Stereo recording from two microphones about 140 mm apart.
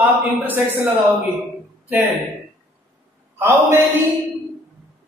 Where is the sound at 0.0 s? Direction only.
15° right (ahead or behind).